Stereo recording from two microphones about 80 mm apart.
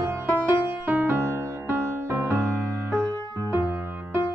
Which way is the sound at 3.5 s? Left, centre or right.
Right.